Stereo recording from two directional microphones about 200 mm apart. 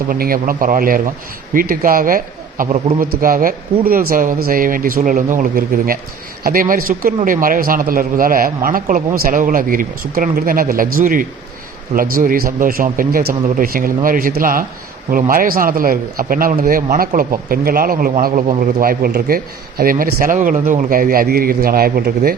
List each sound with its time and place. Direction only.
0.1 s a man's voice: 45° right (ahead or behind)